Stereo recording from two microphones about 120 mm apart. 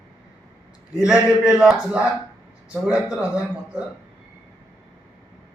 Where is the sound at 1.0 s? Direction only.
5° right (ahead or behind).